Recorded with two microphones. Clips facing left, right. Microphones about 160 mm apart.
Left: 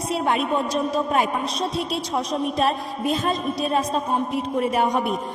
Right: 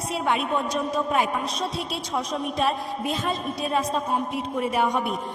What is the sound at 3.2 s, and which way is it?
A man's voice, 35° left (ahead or behind).